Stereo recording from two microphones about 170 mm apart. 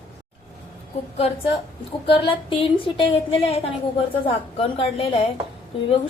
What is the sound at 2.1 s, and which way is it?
A woman's voice, 30° left (ahead or behind).